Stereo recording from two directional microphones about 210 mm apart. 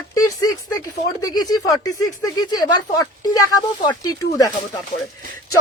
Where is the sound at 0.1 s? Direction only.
15° left (ahead or behind).